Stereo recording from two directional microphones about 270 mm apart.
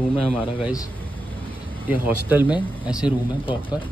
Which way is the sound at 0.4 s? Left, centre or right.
Centre.